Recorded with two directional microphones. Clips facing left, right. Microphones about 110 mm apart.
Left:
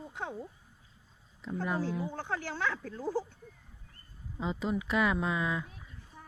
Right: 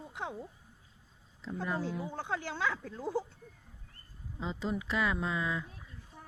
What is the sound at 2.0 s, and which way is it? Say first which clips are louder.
Speech: left 1 dB; 15° right (ahead or behind).